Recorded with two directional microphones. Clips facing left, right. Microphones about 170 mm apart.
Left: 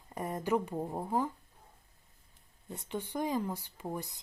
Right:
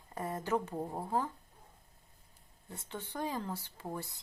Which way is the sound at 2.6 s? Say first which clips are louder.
Left 6 dB; 15° left (ahead or behind).